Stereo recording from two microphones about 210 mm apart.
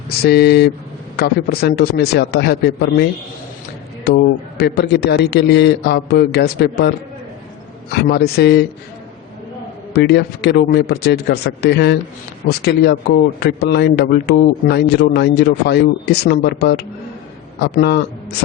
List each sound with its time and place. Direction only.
0.2 s a man's voice: 50° left (ahead or behind)
7.9 s a man's voice: 50° left (ahead or behind)
9.9 s a man's voice: 50° left (ahead or behind)